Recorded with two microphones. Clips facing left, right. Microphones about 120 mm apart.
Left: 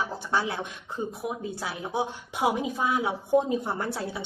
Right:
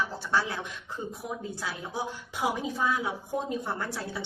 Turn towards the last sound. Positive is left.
turn(degrees=20)  # may be behind; listen again after turning